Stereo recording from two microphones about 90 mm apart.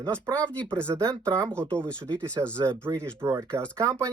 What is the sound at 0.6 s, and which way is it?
Speech, 10° left (ahead or behind).